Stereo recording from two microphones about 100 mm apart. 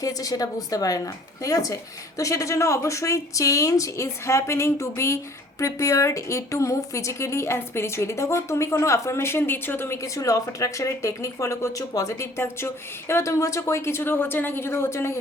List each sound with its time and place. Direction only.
0.0 s speech: 35° left (ahead or behind)